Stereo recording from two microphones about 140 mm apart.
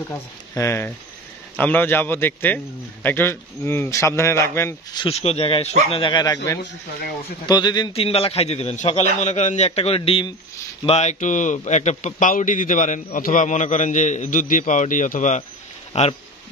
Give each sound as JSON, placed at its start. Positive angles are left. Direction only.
{"t": 0.1, "sound": "a man's voice", "side_deg": 20}
{"t": 4.9, "sound": "a man's voice", "side_deg": 40}
{"t": 7.9, "sound": "a man's voice", "side_deg": 45}
{"t": 10.9, "sound": "a man's voice", "side_deg": 55}
{"t": 15.9, "sound": "speech", "side_deg": 45}